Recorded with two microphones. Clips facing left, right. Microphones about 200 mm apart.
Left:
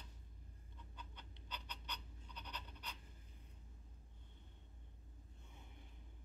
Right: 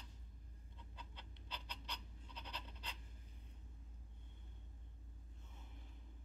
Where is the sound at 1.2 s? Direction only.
30° right (ahead or behind).